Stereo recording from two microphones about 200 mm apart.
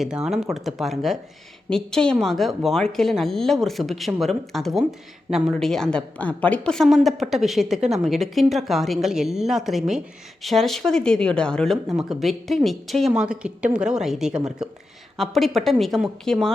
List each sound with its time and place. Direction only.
0.0 s a woman's voice: 5° right (ahead or behind)